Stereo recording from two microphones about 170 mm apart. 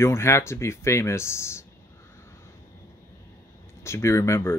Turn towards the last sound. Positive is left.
turn(degrees=15)  # may be behind; listen again after turning